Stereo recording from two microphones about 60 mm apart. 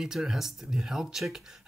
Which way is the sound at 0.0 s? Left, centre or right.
Centre.